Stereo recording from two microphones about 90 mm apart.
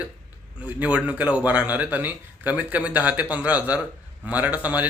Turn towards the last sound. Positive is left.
turn(degrees=-15)  # may be behind; listen again after turning